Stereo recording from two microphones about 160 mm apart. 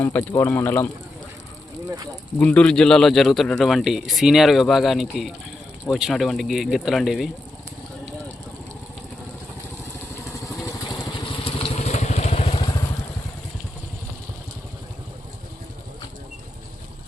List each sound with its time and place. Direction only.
0.0 s a man's voice: 15° left (ahead or behind)
2.4 s speech: 10° left (ahead or behind)
10.6 s vehicle: 20° left (ahead or behind)
11.4 s vehicle: 40° left (ahead or behind)